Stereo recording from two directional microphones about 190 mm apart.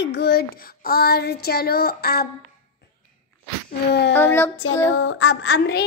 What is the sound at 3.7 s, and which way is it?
Child singing, 65° left (ahead or behind).